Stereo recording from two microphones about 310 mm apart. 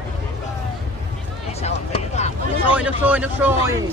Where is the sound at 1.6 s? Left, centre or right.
Left.